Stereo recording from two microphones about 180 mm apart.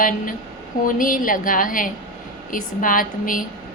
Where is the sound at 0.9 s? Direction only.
50° left (ahead or behind).